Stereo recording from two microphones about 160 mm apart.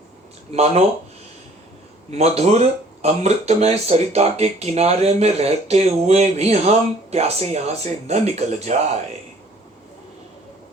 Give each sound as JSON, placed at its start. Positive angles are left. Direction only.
{"t": 0.5, "sound": "speech", "side_deg": -40}
{"t": 2.0, "sound": "speech", "side_deg": -40}